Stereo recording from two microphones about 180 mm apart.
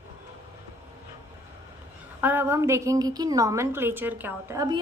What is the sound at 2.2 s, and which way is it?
A woman's voice, 10° right (ahead or behind).